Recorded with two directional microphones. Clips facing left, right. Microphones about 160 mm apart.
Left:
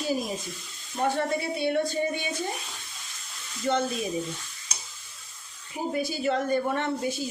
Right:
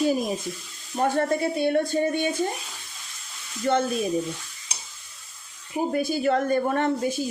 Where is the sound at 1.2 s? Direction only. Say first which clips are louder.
Right 4 dB; 50° right (ahead or behind).